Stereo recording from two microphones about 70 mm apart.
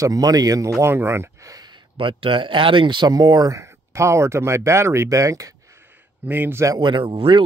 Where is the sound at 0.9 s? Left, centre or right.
Right.